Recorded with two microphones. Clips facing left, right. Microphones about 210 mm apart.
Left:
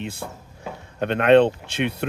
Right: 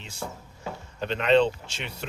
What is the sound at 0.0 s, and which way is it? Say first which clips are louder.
Speech: left 5 dB; 60° left (ahead or behind).